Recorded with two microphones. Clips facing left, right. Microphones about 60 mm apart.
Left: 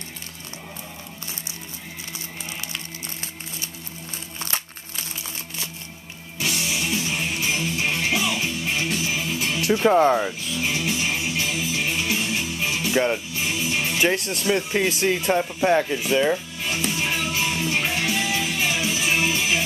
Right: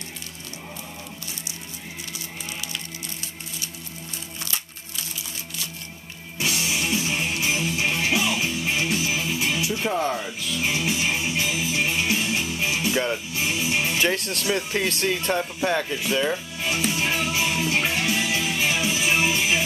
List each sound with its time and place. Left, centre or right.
6.4 s music: right
9.8 s speech: left
10.6 s music: centre
12.3 s music: centre
13.4 s music: centre
14.1 s speech: centre
16.8 s music: centre